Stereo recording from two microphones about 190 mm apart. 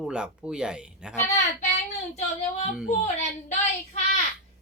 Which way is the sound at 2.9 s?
35° left (ahead or behind).